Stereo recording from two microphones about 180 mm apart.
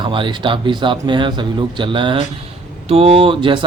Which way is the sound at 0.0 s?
25° right (ahead or behind).